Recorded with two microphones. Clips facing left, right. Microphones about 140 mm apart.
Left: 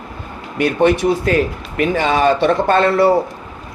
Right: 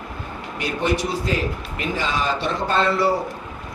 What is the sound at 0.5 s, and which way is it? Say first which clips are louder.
Speech: left 9 dB; 60° left (ahead or behind).